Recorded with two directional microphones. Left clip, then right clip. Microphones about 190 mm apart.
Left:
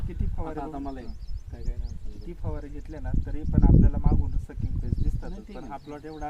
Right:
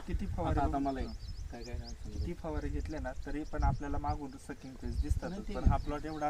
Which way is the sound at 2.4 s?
10° right (ahead or behind).